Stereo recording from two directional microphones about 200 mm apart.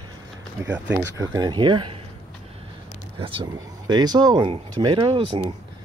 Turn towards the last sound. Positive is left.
turn(degrees=-25)  # may be behind; listen again after turning